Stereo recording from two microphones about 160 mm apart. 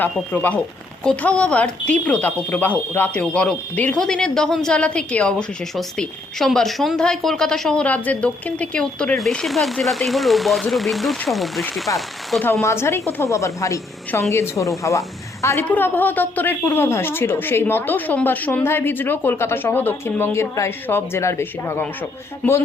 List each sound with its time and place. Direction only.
0.0 s a woman's voice: 10° left (ahead or behind)
11.9 s a woman's voice: 20° left (ahead or behind)
12.3 s a woman's voice: 5° left (ahead or behind)
12.6 s a woman's voice: 15° left (ahead or behind)